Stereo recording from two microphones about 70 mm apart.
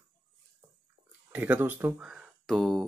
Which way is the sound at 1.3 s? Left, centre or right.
Right.